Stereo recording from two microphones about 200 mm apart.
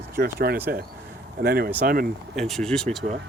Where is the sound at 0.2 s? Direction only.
50° right (ahead or behind).